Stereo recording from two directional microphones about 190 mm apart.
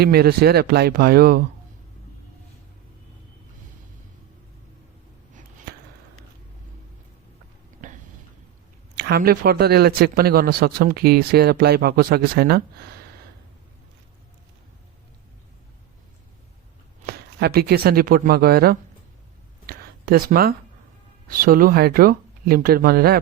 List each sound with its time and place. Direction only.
0.0 s speech: 55° right (ahead or behind)
7.8 s a sound: 40° right (ahead or behind)
9.0 s speech: 55° right (ahead or behind)
17.1 s speech: 55° right (ahead or behind)
19.6 s a sound: 50° right (ahead or behind)
21.2 s speech: 50° right (ahead or behind)